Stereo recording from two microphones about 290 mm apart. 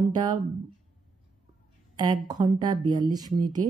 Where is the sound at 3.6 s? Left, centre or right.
Right.